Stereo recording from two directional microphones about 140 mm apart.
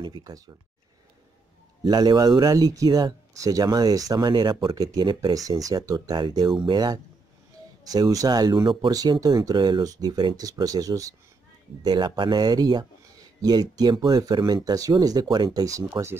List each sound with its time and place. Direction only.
0.0 s speech: 30° right (ahead or behind)
1.9 s speech: 30° right (ahead or behind)